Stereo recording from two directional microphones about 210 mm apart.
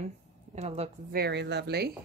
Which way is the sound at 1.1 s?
50° right (ahead or behind).